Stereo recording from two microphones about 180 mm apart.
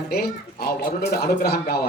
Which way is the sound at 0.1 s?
60° left (ahead or behind).